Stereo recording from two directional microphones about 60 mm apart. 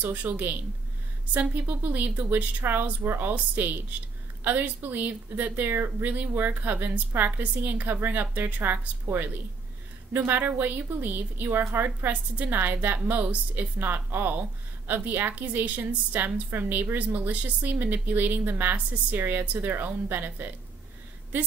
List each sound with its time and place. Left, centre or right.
0.0 s a woman's voice: right
12.1 s a woman's voice: right
12.5 s a woman's voice: right